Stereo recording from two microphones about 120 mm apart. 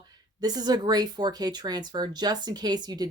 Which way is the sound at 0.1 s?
35° right (ahead or behind).